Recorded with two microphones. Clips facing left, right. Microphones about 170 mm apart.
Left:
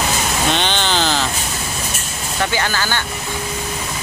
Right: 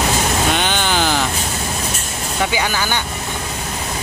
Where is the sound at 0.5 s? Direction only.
10° right (ahead or behind).